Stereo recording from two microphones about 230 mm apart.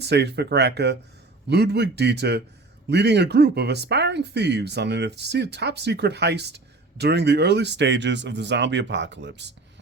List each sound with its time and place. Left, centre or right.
0.0 s speech: right